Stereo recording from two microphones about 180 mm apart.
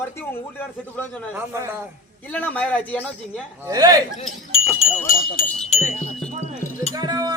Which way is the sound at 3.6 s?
20° right (ahead or behind).